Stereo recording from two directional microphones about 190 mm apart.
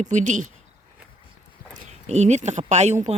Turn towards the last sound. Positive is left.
turn(degrees=-35)  # may be behind; listen again after turning